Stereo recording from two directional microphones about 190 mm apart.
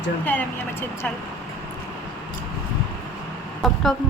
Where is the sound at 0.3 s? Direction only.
10° left (ahead or behind).